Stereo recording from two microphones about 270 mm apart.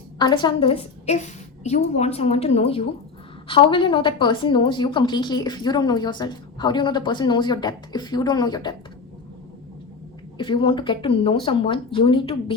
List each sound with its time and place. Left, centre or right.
0.2 s a woman's voice: centre
10.3 s a woman's voice: centre